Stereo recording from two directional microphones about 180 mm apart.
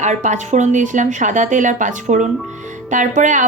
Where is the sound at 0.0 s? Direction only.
40° right (ahead or behind).